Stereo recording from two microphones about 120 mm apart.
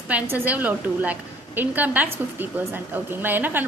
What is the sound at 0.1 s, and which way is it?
A woman's voice, 15° right (ahead or behind).